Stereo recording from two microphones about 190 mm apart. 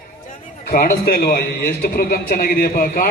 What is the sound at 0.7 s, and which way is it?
A man's voice, 50° left (ahead or behind).